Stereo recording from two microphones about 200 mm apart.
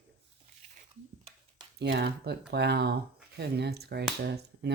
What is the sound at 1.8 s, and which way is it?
Speech, 55° right (ahead or behind).